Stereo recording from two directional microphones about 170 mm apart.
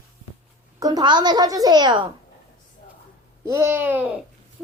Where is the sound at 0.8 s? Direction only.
20° right (ahead or behind).